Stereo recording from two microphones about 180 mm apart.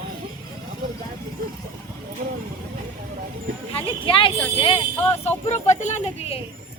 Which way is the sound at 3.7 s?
30° left (ahead or behind).